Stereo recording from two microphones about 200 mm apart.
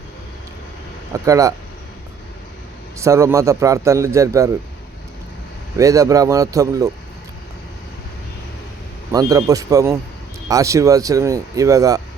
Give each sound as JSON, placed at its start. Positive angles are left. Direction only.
{"t": 1.1, "sound": "a man's voice", "side_deg": -15}
{"t": 3.0, "sound": "a man's voice", "side_deg": -15}
{"t": 5.7, "sound": "a man's voice", "side_deg": -15}
{"t": 9.1, "sound": "a man's voice", "side_deg": -15}